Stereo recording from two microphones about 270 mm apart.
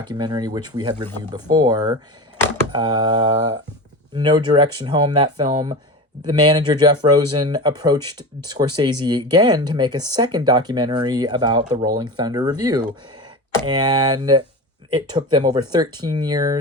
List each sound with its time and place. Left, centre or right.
0.1 s speech: centre